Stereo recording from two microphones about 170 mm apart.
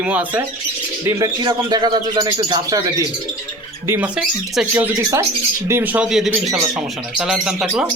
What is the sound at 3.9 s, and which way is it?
Speech, 10° right (ahead or behind).